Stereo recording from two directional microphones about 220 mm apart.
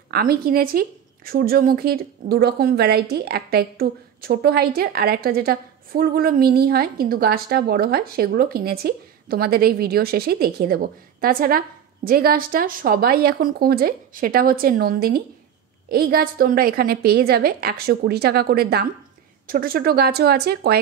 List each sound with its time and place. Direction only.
0.1 s a woman's voice: 45° right (ahead or behind)